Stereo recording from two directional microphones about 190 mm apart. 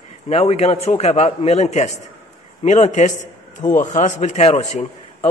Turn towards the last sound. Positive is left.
turn(degrees=35)  # may be behind; listen again after turning